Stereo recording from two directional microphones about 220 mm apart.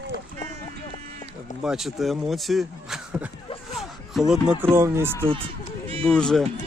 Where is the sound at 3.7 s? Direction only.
Centre (ahead or behind).